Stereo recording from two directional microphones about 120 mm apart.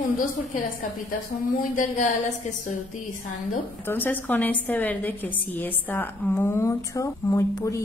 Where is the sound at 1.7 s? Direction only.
90° left.